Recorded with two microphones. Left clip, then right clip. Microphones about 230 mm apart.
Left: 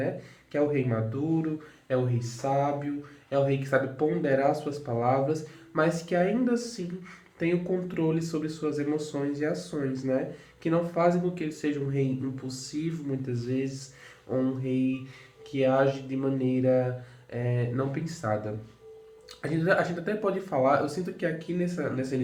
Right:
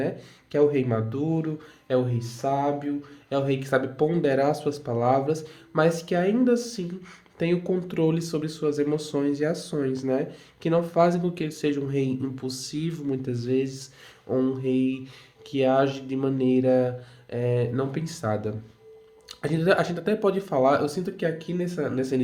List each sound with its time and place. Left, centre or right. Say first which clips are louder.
0.5 s speech: right 5 dB; right